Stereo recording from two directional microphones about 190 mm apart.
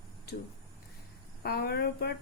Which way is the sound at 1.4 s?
55° left (ahead or behind).